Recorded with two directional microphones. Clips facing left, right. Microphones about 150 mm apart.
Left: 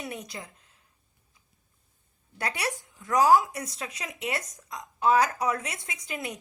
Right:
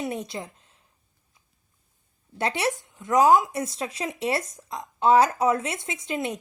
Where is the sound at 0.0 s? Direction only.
30° right (ahead or behind).